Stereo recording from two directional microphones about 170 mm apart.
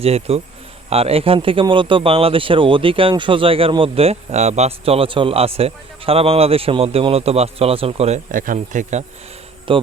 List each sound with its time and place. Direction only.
0.0 s speech: 35° right (ahead or behind)
9.7 s speech: 30° right (ahead or behind)